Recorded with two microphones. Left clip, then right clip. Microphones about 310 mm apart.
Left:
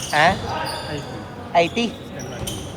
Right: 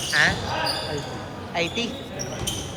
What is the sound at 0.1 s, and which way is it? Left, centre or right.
Speech, centre.